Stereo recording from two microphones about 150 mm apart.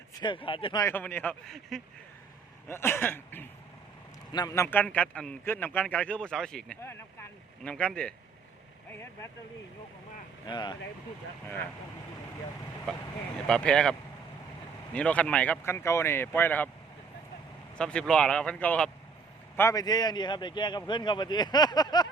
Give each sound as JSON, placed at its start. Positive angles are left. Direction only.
{"t": 0.1, "sound": "speech", "side_deg": 30}
{"t": 0.8, "sound": "a man's voice", "side_deg": 15}
{"t": 2.6, "sound": "a man's voice", "side_deg": 15}
{"t": 4.3, "sound": "a man's voice", "side_deg": 25}
{"t": 10.4, "sound": "a man's voice", "side_deg": 30}
{"t": 12.9, "sound": "speech", "side_deg": 5}
{"t": 14.9, "sound": "a man's voice", "side_deg": 10}
{"t": 17.7, "sound": "speech", "side_deg": 5}
{"t": 19.5, "sound": "a man's voice", "side_deg": 20}